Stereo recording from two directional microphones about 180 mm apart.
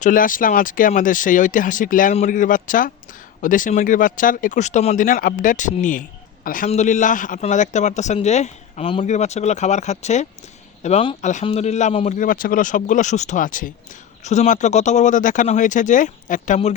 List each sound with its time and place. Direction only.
0.0 s speech: 50° left (ahead or behind)